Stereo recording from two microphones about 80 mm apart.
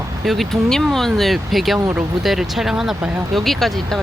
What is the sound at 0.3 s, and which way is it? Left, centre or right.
Speech, centre.